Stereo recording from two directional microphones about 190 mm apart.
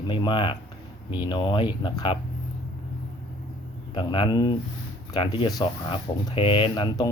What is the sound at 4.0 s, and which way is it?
Speech, 25° left (ahead or behind).